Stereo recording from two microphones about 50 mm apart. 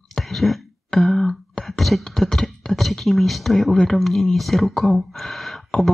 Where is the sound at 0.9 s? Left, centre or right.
Centre.